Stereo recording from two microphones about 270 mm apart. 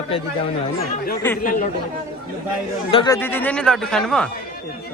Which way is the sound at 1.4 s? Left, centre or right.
Left.